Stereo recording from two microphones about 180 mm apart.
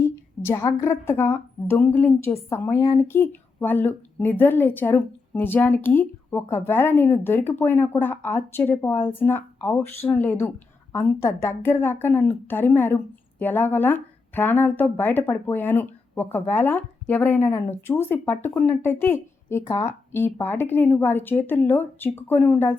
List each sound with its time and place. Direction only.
0.0 s a woman's voice: 15° left (ahead or behind)